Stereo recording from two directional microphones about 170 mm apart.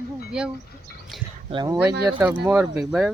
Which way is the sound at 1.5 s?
25° right (ahead or behind).